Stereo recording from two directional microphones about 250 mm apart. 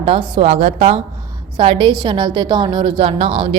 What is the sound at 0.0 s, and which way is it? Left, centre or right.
A woman's voice, right.